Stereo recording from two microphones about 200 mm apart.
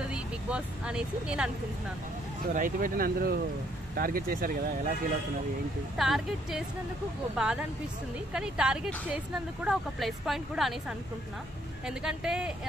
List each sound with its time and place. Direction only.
0.1 s speech: 5° right (ahead or behind)
2.5 s speech: 45° right (ahead or behind)
5.9 s speech: centre (ahead or behind)